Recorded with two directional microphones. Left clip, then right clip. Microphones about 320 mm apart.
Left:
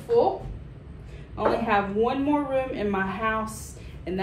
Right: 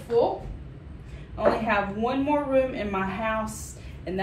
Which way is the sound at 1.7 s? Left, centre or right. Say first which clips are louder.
Left 2 dB; centre.